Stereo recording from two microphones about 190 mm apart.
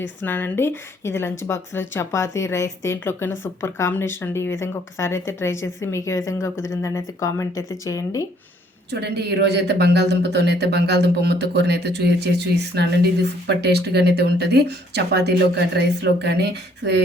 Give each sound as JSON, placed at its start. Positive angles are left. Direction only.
{"t": 0.2, "sound": "a woman's voice", "side_deg": 10}
{"t": 8.9, "sound": "speech", "side_deg": -60}